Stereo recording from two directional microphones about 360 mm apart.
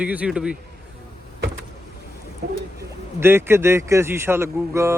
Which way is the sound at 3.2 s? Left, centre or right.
Centre.